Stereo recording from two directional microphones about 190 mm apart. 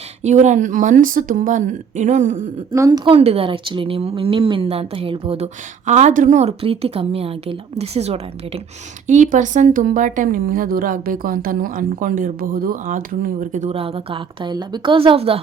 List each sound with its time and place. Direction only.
0.2 s speech: 40° right (ahead or behind)
2.7 s speech: 20° right (ahead or behind)